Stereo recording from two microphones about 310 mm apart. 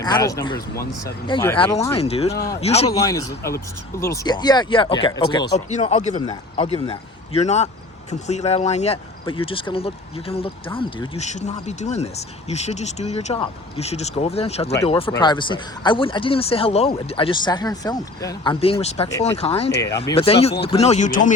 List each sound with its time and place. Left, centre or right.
0.0 s speech: centre